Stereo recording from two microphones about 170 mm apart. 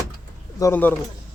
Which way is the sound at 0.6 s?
10° left (ahead or behind).